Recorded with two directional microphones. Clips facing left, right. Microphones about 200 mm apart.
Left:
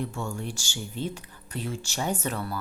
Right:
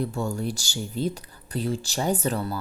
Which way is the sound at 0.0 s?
35° right (ahead or behind).